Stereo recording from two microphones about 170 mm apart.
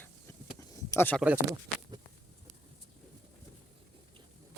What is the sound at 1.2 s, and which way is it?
Speech, 10° right (ahead or behind).